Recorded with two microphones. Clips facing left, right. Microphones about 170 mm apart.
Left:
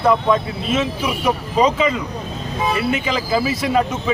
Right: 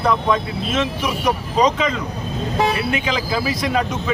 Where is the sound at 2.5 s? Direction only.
80° right.